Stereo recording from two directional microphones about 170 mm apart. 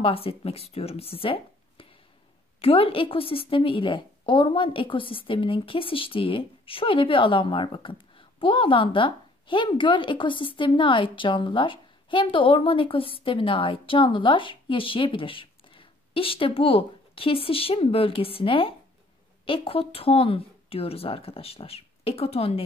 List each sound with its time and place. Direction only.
0.0 s a woman's voice: 35° left (ahead or behind)